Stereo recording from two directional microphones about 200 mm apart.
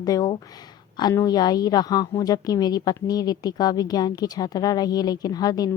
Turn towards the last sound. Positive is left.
turn(degrees=20)  # may be behind; listen again after turning